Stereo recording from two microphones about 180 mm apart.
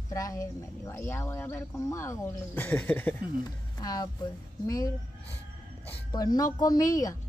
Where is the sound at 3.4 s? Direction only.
20° left (ahead or behind).